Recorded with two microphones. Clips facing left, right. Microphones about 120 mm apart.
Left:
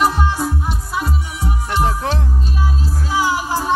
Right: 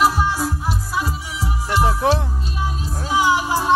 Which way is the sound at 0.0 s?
5° right (ahead or behind).